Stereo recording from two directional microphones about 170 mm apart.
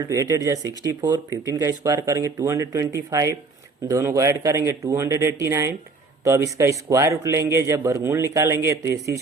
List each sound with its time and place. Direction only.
0.0 s a man's voice: 20° right (ahead or behind)